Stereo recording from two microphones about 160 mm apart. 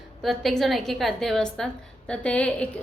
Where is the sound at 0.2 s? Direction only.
Centre (ahead or behind).